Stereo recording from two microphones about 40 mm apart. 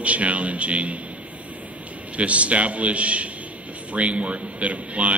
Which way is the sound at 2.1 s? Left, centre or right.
Right.